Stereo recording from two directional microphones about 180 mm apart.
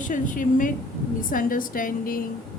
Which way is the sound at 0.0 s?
45° left (ahead or behind).